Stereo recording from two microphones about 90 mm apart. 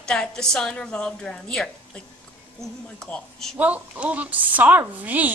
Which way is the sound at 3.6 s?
15° right (ahead or behind).